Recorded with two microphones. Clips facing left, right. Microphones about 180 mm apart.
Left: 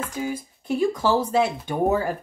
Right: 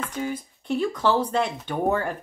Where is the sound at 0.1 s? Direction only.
10° left (ahead or behind).